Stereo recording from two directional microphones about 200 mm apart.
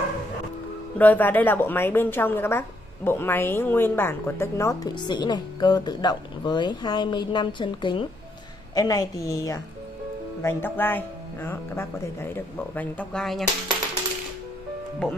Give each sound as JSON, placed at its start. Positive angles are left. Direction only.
{"t": 0.9, "sound": "a woman's voice", "side_deg": 10}